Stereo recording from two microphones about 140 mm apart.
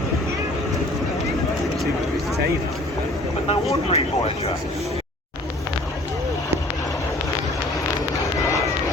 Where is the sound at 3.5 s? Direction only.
45° left (ahead or behind).